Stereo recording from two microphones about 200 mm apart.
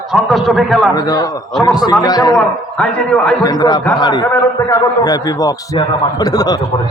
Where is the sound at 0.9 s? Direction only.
20° left (ahead or behind).